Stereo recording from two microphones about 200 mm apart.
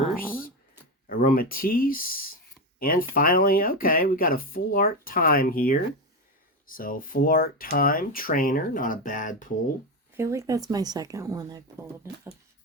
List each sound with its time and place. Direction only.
1.0 s speech: 45° left (ahead or behind)
10.2 s a woman's voice: 15° right (ahead or behind)